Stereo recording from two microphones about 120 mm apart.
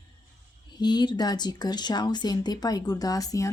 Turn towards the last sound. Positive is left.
turn(degrees=30)  # may be behind; listen again after turning